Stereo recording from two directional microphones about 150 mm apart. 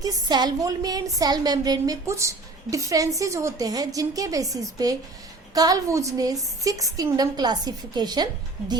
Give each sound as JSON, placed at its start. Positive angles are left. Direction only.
{"t": 0.0, "sound": "a woman's voice", "side_deg": -25}